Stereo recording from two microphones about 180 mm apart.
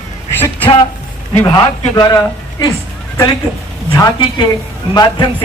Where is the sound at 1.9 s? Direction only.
25° left (ahead or behind).